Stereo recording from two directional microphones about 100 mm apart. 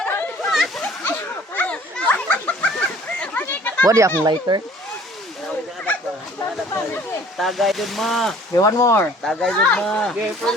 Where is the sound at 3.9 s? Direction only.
30° right (ahead or behind).